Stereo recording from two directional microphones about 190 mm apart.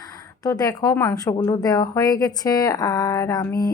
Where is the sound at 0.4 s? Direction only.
20° left (ahead or behind).